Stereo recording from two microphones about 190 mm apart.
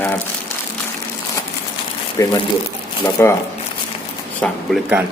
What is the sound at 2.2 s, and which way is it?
Speech, 15° left (ahead or behind).